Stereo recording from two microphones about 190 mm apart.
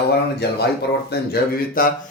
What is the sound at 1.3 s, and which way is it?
Speech, 50° left (ahead or behind).